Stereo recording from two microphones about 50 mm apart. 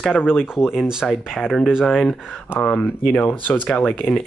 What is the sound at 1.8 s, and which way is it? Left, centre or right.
Speech, centre.